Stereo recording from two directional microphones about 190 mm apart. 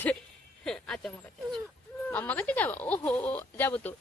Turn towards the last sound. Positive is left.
turn(degrees=10)  # may be behind; listen again after turning